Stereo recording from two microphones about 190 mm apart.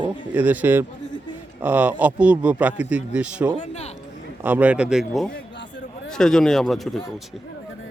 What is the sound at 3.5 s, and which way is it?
Speech, 35° left (ahead or behind).